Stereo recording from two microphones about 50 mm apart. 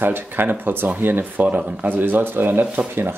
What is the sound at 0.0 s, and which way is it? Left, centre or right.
Speech, right.